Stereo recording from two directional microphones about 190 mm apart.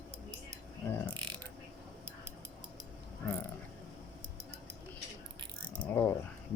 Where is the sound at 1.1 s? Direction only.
20° right (ahead or behind).